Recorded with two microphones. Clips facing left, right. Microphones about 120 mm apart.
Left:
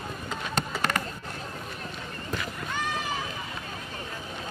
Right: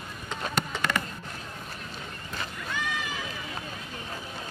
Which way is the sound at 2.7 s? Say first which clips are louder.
Left 2 dB; 40° left (ahead or behind).